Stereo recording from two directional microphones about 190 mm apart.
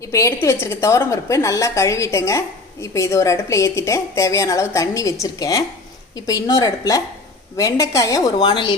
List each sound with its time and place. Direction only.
0.1 s a woman's voice: 15° left (ahead or behind)